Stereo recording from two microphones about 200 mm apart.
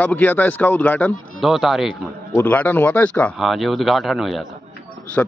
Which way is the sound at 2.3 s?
10° left (ahead or behind).